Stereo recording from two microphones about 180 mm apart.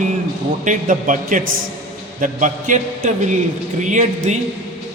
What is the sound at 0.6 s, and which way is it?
Mantra, 45° right (ahead or behind).